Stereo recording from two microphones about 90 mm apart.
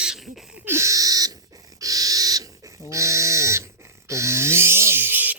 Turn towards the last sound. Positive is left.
turn(degrees=-20)  # may be behind; listen again after turning